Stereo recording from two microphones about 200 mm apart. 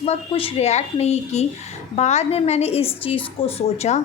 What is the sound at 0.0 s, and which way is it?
A woman's voice, 30° left (ahead or behind).